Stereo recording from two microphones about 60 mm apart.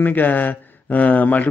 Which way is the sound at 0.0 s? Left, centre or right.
Left.